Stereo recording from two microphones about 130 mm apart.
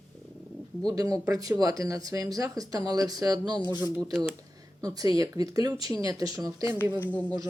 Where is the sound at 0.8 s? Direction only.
25° right (ahead or behind).